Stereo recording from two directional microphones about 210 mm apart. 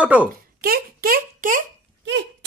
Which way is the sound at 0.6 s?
45° right (ahead or behind).